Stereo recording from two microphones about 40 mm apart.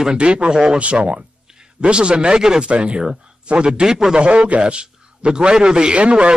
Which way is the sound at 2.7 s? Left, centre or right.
Right.